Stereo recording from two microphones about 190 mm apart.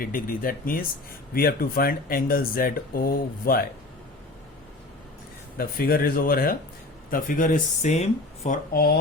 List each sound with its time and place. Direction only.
0.0 s speech: 50° left (ahead or behind)
5.5 s speech: 50° left (ahead or behind)
8.7 s speech: 55° left (ahead or behind)